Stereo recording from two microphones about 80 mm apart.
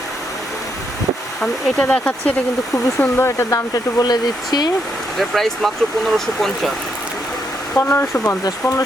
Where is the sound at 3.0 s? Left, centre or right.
Left.